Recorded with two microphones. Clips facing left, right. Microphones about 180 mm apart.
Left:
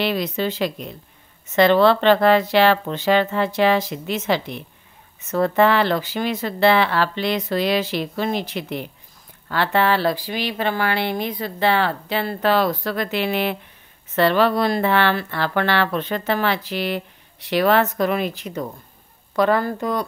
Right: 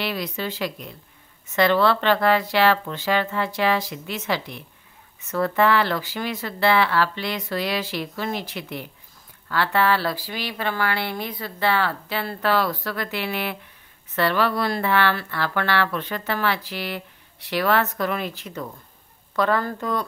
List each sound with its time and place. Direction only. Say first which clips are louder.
0.0 s a woman's voice: left 6 dB; 25° left (ahead or behind)